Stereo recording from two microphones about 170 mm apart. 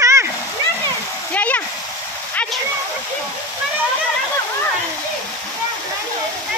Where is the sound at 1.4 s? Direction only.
10° left (ahead or behind).